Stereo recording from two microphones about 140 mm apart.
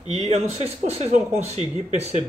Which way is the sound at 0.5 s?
50° right (ahead or behind).